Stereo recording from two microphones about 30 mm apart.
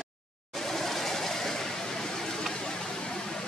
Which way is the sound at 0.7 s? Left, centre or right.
Centre.